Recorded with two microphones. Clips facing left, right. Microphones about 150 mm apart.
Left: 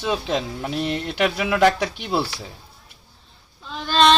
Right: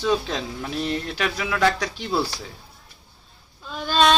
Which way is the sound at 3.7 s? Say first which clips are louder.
Left 2 dB; 5° right (ahead or behind).